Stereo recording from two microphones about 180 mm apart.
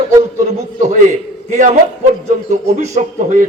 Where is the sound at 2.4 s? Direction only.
40° right (ahead or behind).